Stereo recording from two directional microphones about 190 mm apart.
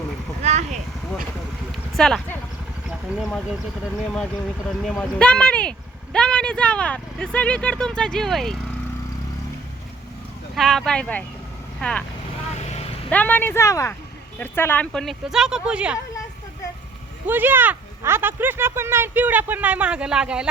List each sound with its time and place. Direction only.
0.4 s a sound: 35° right (ahead or behind)
2.0 s speech: centre (ahead or behind)
4.8 s speech: 5° left (ahead or behind)
10.5 s speech: centre (ahead or behind)
12.5 s vehicle: 35° left (ahead or behind)
13.1 s speech: 10° left (ahead or behind)
17.2 s speech: 10° right (ahead or behind)